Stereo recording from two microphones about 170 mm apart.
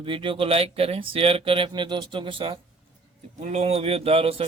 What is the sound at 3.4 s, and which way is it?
Speech, 40° right (ahead or behind).